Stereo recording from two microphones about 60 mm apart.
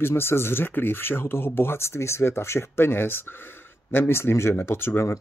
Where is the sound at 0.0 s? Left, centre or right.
Left.